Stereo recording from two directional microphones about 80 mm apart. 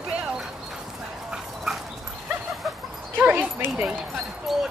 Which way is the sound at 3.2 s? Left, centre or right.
Right.